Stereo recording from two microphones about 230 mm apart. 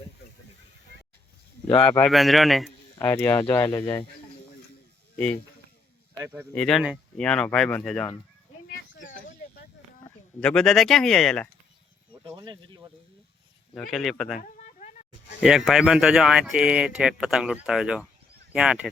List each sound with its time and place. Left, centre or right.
1.6 s speech: centre
5.1 s speech: centre
6.2 s speech: centre
6.5 s speech: centre
10.4 s speech: centre
12.2 s speech: centre
13.9 s speech: centre
14.4 s a sound: left
15.4 s speech: centre